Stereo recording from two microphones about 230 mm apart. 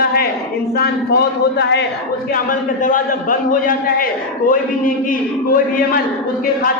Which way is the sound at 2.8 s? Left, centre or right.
Left.